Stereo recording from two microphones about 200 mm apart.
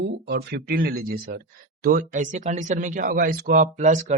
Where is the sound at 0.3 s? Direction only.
55° right (ahead or behind).